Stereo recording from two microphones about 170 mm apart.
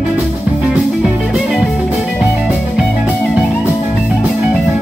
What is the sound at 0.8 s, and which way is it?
Music, centre (ahead or behind).